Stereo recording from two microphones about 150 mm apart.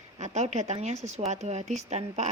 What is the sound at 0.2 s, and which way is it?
A woman's voice, 50° right (ahead or behind).